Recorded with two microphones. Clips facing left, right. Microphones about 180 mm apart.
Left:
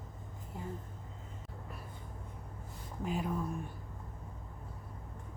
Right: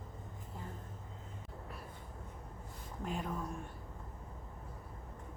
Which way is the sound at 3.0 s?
5° left (ahead or behind).